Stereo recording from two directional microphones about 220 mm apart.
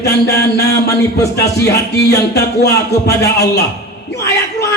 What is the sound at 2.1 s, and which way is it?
Speech, 50° left (ahead or behind).